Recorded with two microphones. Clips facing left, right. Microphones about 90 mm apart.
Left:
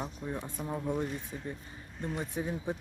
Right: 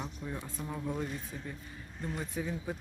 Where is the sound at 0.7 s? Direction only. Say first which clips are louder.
Left 3 dB; 20° left (ahead or behind).